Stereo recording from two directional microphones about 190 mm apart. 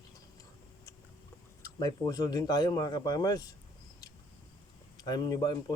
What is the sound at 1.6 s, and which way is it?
A man's voice, 20° left (ahead or behind).